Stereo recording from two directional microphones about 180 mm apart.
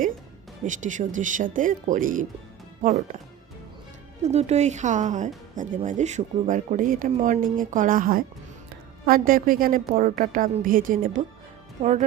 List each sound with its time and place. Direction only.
0.6 s speech: 45° right (ahead or behind)
4.2 s speech: 35° right (ahead or behind)